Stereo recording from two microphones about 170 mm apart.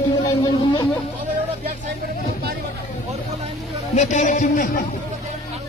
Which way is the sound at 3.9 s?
45° left (ahead or behind).